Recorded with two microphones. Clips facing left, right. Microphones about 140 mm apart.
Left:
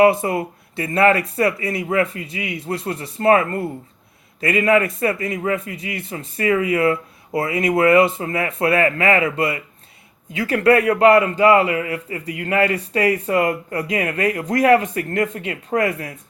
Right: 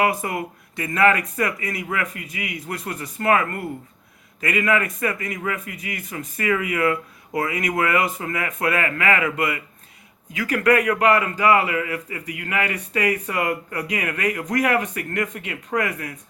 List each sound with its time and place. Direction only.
0.0 s a man's voice: 30° left (ahead or behind)